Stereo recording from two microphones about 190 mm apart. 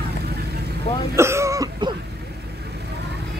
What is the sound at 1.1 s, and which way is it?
Cough, 15° right (ahead or behind).